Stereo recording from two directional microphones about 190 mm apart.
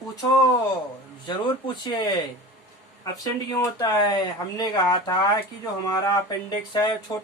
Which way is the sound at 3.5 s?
20° left (ahead or behind).